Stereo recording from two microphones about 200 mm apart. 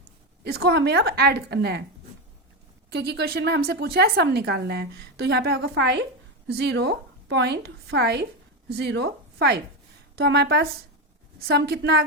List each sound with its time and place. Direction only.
0.4 s a woman's voice: 55° right (ahead or behind)
2.9 s a woman's voice: 55° right (ahead or behind)